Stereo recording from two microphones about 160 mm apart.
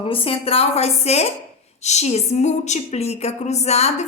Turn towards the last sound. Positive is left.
turn(degrees=40)  # may be behind; listen again after turning